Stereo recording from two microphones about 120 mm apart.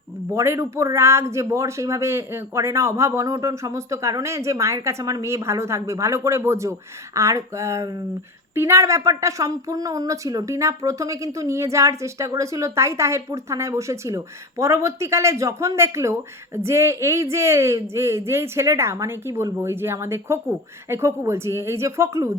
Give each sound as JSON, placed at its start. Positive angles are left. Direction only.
{"t": 0.3, "sound": "speech", "side_deg": -25}